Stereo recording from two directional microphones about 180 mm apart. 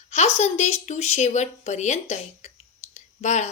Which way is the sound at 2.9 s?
40° left (ahead or behind).